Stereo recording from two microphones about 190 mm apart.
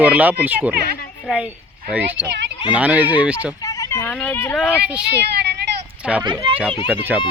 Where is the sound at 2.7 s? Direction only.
10° right (ahead or behind).